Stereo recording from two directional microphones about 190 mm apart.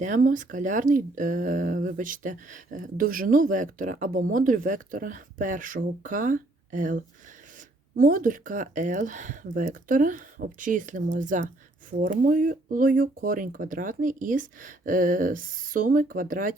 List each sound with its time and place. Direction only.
0.0 s speech: 45° right (ahead or behind)